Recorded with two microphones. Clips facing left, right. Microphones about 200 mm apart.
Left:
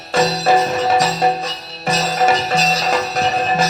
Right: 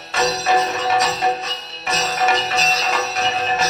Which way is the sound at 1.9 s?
30° left (ahead or behind).